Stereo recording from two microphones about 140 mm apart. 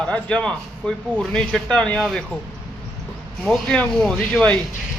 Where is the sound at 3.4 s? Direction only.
Centre (ahead or behind).